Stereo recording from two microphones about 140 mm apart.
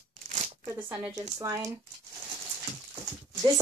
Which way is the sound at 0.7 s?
15° right (ahead or behind).